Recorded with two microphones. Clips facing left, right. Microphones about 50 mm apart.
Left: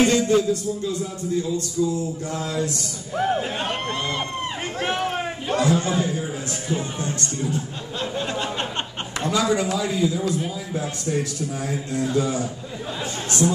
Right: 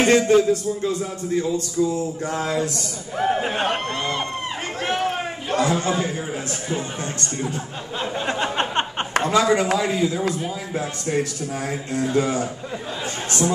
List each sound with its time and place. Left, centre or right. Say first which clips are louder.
0.1 s a man's voice: right 3 dB; right
3.2 s speech: right 2 dB; centre
3.9 s speech: right 1 dB; centre
4.7 s a sound: right 1 dB; centre
5.6 s a man's voice: even; right
8.0 s speech: right 1 dB; centre
8.3 s a sound: right 4 dB; right
9.3 s a man's voice: right 2 dB; right
13.4 s speech: left 1 dB; centre